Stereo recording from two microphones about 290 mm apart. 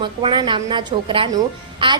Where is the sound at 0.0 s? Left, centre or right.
Centre.